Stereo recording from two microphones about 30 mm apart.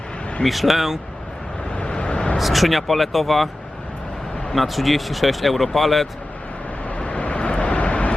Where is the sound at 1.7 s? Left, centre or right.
Left.